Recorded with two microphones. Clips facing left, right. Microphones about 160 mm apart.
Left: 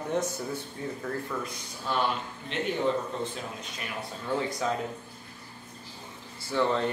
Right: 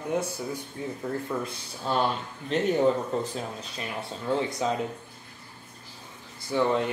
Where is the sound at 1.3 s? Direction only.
30° right (ahead or behind).